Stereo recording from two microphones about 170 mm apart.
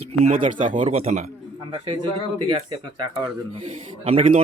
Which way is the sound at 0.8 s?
35° right (ahead or behind).